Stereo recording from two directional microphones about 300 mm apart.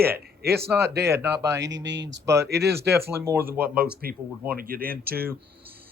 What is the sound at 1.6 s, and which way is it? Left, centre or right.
Speech, right.